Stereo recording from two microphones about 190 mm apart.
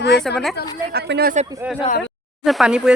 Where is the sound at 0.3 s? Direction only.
Centre (ahead or behind).